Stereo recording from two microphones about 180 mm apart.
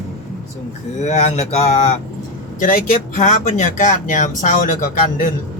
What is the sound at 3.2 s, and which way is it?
Speech, 40° left (ahead or behind).